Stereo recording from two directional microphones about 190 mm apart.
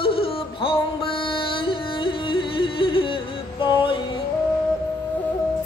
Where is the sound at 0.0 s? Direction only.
30° left (ahead or behind).